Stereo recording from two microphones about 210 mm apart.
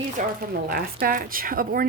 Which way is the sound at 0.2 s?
45° right (ahead or behind).